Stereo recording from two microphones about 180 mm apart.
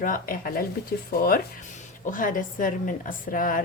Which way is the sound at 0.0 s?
50° left (ahead or behind).